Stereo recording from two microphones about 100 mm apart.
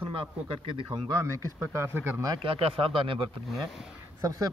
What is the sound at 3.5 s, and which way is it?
Speech, centre (ahead or behind).